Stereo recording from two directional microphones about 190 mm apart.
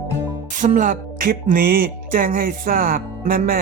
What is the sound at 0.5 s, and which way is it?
Music, 45° right (ahead or behind).